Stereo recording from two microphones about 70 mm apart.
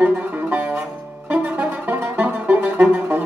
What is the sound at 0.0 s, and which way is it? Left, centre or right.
Music, right.